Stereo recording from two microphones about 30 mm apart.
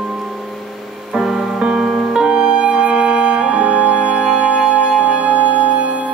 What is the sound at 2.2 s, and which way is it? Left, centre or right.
Music, right.